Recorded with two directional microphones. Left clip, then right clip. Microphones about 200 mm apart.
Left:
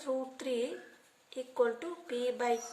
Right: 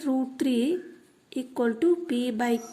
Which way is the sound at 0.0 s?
45° right (ahead or behind).